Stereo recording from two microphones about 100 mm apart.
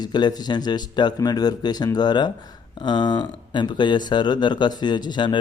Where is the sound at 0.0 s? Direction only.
45° left (ahead or behind).